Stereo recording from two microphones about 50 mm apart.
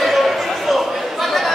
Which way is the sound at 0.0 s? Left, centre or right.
Centre.